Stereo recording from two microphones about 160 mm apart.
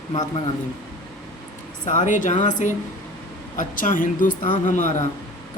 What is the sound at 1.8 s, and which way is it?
A woman's voice, 50° left (ahead or behind).